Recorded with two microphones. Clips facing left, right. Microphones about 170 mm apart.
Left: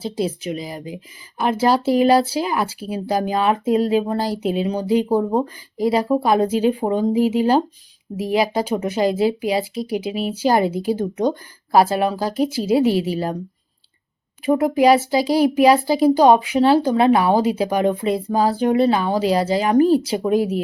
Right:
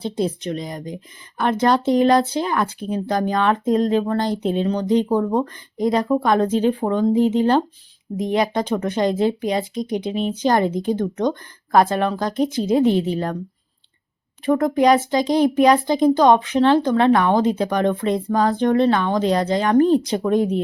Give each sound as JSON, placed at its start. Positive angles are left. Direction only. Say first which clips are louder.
{"t": 0.0, "sound": "speech", "louder": "even", "side_deg": 5}
{"t": 14.4, "sound": "speech", "louder": "left 1 dB", "side_deg": 10}